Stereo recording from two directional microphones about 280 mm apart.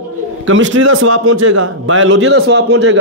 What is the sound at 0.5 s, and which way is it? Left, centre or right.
A man's voice, right.